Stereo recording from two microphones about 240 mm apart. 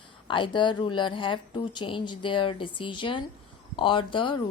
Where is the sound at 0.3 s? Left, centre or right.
Centre.